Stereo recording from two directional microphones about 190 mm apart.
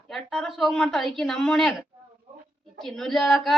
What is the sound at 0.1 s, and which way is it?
Speech, centre (ahead or behind).